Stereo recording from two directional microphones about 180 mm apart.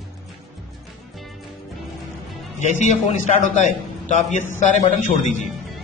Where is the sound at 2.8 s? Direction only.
40° left (ahead or behind).